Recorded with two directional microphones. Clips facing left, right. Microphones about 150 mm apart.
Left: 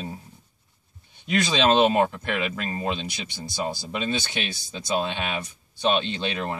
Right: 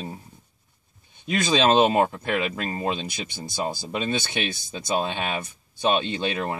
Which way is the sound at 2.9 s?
50° right (ahead or behind).